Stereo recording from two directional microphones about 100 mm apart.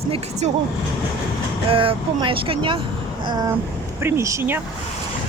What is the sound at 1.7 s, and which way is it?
Speech, 60° right (ahead or behind).